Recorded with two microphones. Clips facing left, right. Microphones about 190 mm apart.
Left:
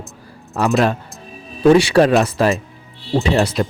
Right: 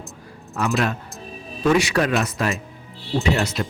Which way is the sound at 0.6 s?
35° left (ahead or behind).